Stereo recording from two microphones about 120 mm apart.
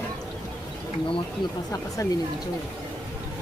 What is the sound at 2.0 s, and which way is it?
Speech, 30° left (ahead or behind).